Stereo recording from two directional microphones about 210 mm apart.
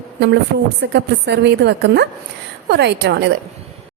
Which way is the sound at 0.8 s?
55° right (ahead or behind).